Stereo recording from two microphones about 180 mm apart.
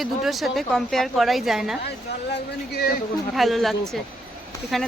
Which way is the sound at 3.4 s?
Centre (ahead or behind).